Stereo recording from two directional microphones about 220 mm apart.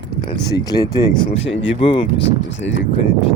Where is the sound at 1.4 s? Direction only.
60° left (ahead or behind).